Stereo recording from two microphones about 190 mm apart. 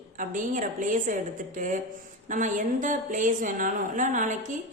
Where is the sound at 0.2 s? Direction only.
45° right (ahead or behind).